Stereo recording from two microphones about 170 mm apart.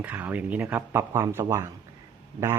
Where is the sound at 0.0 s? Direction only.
10° right (ahead or behind).